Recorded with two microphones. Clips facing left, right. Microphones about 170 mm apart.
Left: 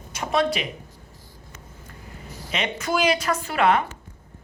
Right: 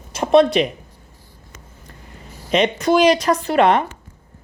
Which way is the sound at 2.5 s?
35° right (ahead or behind).